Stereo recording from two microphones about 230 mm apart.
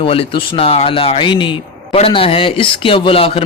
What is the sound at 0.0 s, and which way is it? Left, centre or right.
Speech, left.